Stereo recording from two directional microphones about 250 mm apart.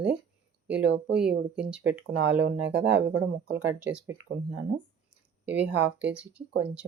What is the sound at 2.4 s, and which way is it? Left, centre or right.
Speech, right.